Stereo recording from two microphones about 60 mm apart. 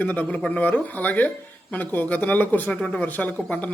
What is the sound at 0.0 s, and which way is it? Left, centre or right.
A man's voice, left.